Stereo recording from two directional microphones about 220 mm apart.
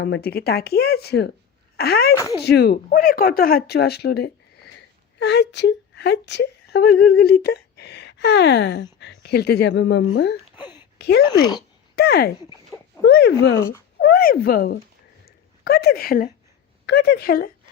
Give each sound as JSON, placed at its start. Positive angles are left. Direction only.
{"t": 0.0, "sound": "speech", "side_deg": 45}
{"t": 2.1, "sound": "speech", "side_deg": 15}
{"t": 2.4, "sound": "speech", "side_deg": 45}
{"t": 10.9, "sound": "a sound", "side_deg": 50}
{"t": 11.9, "sound": "speech", "side_deg": 45}